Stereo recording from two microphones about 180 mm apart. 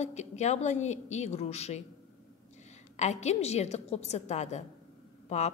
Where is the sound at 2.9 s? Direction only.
40° left (ahead or behind).